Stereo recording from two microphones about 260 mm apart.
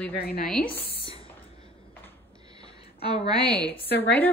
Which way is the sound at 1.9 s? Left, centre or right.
Centre.